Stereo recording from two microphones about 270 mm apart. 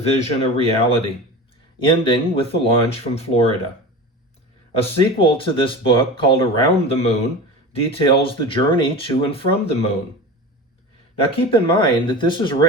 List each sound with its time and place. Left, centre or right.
0.2 s speech: left
4.8 s speech: left
11.2 s speech: left